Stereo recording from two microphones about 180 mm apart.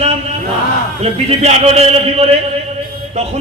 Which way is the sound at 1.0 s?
35° right (ahead or behind).